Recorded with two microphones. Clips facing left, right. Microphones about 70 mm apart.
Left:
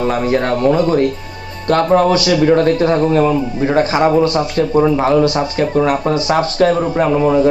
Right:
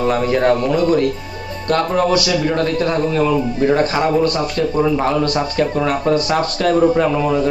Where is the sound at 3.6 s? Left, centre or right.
Centre.